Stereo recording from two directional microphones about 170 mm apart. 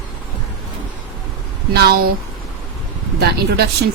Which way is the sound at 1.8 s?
65° right (ahead or behind).